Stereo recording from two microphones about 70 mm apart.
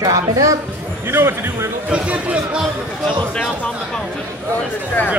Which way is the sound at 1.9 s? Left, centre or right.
Centre.